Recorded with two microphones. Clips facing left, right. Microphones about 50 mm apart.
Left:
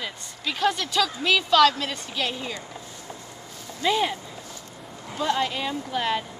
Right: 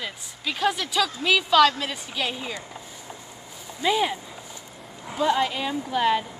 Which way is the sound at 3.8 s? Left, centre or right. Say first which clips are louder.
Even; centre.